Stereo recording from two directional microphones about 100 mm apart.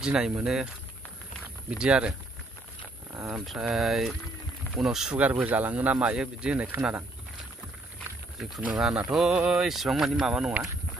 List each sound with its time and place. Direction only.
0.0 s speech: 10° right (ahead or behind)
1.7 s speech: 10° right (ahead or behind)
3.3 s speech: 10° right (ahead or behind)
5.2 s speech: 15° right (ahead or behind)
8.7 s speech: 5° right (ahead or behind)